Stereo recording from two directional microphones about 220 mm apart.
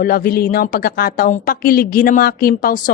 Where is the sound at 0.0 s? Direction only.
40° left (ahead or behind).